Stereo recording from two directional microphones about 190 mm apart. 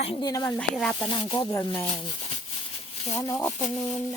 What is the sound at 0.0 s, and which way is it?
Speech, 30° left (ahead or behind).